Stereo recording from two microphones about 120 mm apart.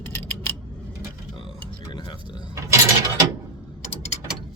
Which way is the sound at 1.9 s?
40° left (ahead or behind).